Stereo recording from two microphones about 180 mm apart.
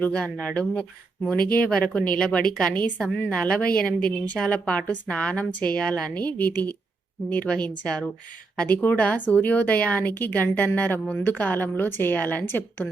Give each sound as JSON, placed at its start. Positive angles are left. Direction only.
{"t": 0.0, "sound": "a woman's voice", "side_deg": 5}
{"t": 1.4, "sound": "speech", "side_deg": 55}
{"t": 1.6, "sound": "a woman's voice", "side_deg": 10}